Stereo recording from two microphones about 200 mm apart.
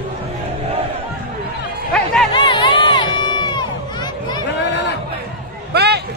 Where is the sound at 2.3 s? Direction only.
25° left (ahead or behind).